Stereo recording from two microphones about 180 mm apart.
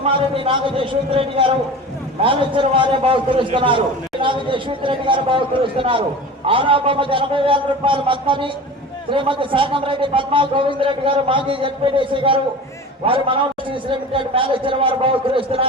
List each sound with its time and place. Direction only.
0.0 s a man's voice: 30° right (ahead or behind)